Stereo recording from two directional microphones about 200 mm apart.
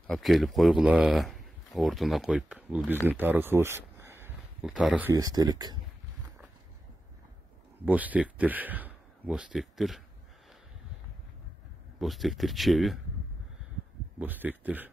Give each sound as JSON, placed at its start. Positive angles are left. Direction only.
{"t": 0.0, "sound": "speech", "side_deg": 0}
{"t": 5.1, "sound": "speech", "side_deg": -20}
{"t": 7.8, "sound": "a man's voice", "side_deg": -10}
{"t": 12.0, "sound": "speech", "side_deg": 0}
{"t": 14.2, "sound": "speech", "side_deg": -10}